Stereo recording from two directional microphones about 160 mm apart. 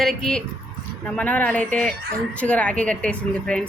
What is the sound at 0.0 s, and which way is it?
Speech, centre (ahead or behind).